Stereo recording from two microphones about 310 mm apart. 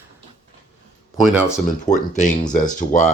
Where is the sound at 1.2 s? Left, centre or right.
Centre.